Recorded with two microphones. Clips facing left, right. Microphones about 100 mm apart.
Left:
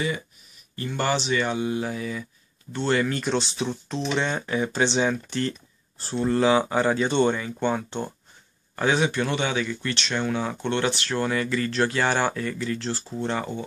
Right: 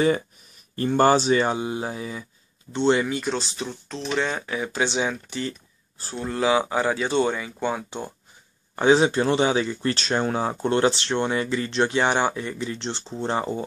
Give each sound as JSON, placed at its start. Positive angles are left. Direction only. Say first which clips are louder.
{"t": 0.7, "sound": "speech", "louder": "right 7 dB", "side_deg": -40}
{"t": 3.0, "sound": "speech", "louder": "left 1 dB", "side_deg": -10}
{"t": 8.7, "sound": "speech", "louder": "right 5 dB", "side_deg": -25}